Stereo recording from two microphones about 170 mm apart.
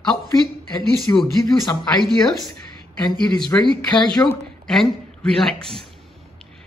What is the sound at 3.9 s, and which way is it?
Speech, 25° left (ahead or behind).